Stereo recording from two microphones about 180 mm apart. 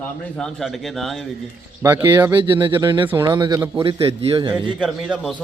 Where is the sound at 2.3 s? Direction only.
25° right (ahead or behind).